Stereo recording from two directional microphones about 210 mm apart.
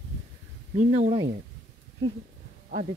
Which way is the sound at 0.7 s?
35° right (ahead or behind).